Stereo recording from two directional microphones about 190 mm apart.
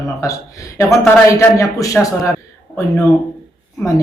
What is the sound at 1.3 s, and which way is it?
Speech, 15° left (ahead or behind).